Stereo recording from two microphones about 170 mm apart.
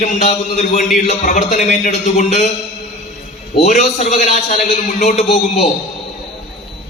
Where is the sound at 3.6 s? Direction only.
45° left (ahead or behind).